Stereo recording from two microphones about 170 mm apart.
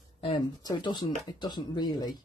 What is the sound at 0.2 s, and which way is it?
Speech, 25° left (ahead or behind).